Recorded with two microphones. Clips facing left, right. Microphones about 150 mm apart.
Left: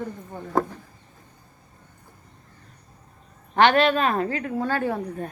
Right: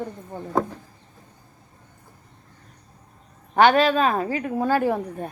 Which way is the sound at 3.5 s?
5° right (ahead or behind).